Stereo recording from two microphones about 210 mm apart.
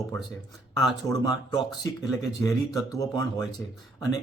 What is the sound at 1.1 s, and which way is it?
Speech, 20° left (ahead or behind).